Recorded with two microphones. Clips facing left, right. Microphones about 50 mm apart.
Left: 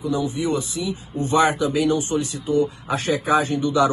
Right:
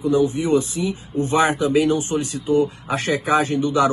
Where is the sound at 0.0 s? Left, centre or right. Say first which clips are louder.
Right 5 dB; right.